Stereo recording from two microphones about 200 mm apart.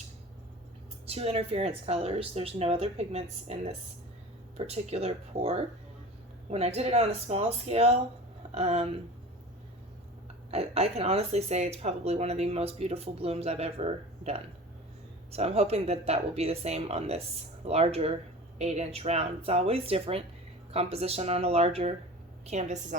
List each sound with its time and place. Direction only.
1.0 s speech: 30° right (ahead or behind)
10.5 s speech: 30° right (ahead or behind)